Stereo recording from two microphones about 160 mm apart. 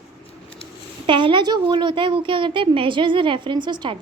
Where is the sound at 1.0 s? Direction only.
30° right (ahead or behind).